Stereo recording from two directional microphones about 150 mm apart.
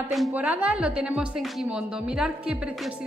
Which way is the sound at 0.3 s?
10° right (ahead or behind).